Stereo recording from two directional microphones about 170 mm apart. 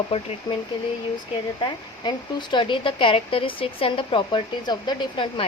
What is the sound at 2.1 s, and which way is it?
Speech, 30° left (ahead or behind).